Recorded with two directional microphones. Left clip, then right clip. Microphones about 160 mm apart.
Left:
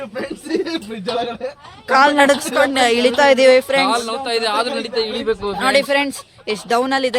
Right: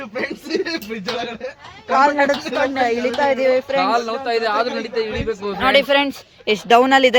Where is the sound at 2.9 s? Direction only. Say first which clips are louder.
Left 5 dB; 45° left (ahead or behind).